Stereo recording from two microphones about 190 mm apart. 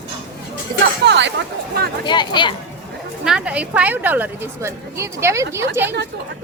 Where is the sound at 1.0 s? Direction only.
65° right (ahead or behind).